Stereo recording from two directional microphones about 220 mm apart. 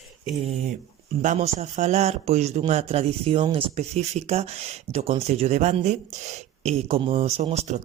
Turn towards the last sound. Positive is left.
turn(degrees=-30)  # may be behind; listen again after turning